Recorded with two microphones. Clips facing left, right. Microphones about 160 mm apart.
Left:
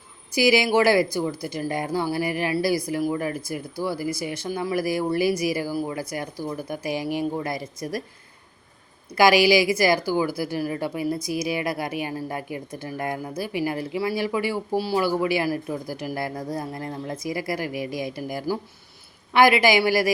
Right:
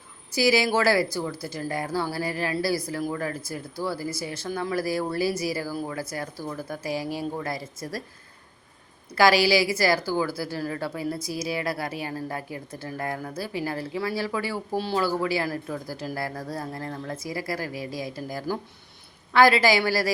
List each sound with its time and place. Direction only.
0.3 s a woman's voice: 15° left (ahead or behind)
9.1 s a woman's voice: 15° left (ahead or behind)